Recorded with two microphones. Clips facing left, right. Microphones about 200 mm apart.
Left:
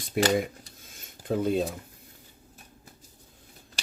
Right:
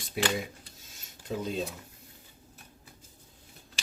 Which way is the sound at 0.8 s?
55° left (ahead or behind).